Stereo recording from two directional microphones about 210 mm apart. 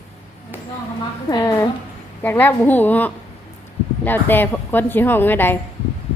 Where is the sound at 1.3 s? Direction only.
15° left (ahead or behind).